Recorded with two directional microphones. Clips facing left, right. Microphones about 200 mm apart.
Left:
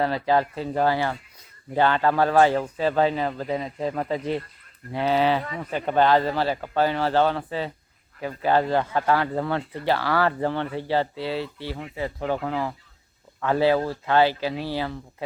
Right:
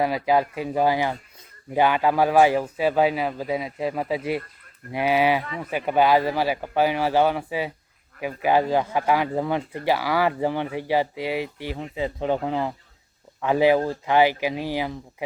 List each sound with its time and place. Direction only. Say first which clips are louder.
0.0 s a man's voice: right 1 dB; 10° right (ahead or behind)